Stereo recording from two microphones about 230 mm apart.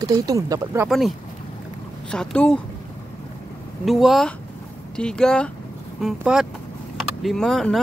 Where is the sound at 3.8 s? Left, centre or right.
Centre.